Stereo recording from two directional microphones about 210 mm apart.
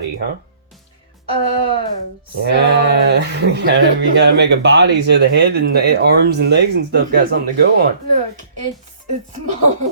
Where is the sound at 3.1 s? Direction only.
55° right (ahead or behind).